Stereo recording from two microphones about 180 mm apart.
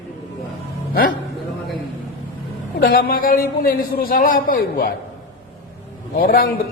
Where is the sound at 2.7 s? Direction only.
60° left (ahead or behind).